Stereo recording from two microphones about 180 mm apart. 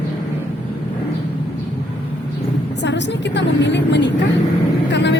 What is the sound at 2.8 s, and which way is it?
Speech, 75° left (ahead or behind).